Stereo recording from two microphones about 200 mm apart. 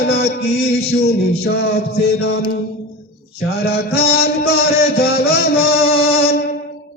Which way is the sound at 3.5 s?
50° left (ahead or behind).